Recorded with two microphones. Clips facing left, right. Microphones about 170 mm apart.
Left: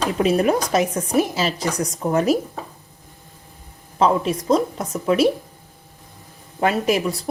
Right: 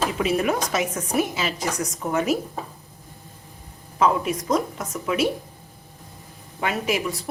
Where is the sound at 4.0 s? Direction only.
30° left (ahead or behind).